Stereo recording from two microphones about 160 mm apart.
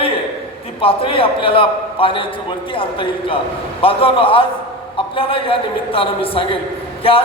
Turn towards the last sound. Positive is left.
turn(degrees=35)  # may be behind; listen again after turning